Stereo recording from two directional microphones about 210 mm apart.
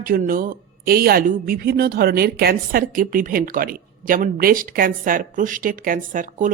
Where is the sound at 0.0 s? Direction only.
45° right (ahead or behind).